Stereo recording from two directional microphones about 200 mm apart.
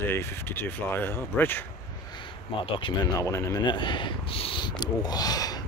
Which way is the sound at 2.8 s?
25° left (ahead or behind).